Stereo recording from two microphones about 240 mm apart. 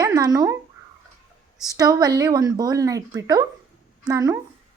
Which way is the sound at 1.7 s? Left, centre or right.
Centre.